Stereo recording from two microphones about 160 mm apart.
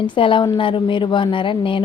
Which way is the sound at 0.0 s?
30° left (ahead or behind).